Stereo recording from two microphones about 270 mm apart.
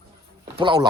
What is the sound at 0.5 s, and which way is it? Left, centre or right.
Speech, centre.